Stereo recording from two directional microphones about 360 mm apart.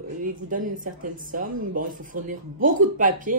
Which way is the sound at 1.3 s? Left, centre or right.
Right.